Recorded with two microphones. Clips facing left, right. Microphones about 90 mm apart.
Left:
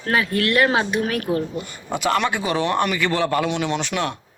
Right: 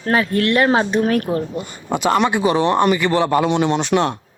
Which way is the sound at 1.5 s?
25° right (ahead or behind).